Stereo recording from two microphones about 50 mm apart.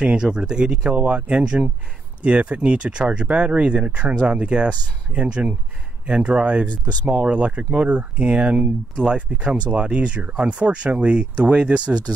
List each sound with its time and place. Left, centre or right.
0.0 s speech: centre